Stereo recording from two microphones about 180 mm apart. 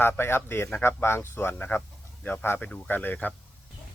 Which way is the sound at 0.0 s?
10° left (ahead or behind).